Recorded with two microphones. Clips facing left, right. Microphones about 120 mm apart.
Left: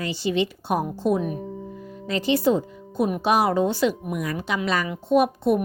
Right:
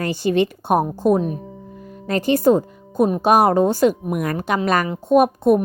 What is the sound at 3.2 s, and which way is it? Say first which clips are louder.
Speech: right 5 dB; 45° right (ahead or behind).